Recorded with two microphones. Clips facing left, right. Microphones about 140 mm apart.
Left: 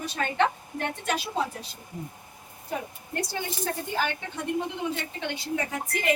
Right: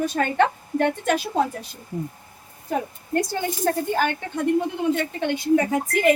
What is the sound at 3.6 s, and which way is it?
Speech, 50° right (ahead or behind).